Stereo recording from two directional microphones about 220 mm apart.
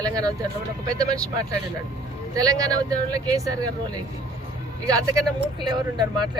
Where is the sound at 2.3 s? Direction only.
15° right (ahead or behind).